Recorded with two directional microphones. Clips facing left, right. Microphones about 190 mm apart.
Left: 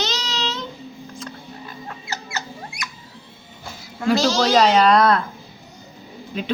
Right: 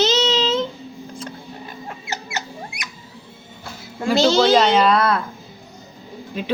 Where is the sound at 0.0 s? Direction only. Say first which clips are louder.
Right 9 dB; 25° right (ahead or behind).